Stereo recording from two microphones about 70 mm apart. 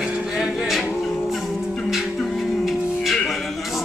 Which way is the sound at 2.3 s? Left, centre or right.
Centre.